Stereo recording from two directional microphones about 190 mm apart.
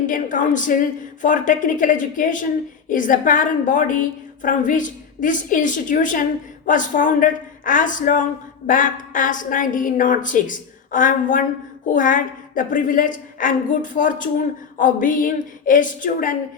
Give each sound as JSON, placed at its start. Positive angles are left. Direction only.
{"t": 0.0, "sound": "speech", "side_deg": 45}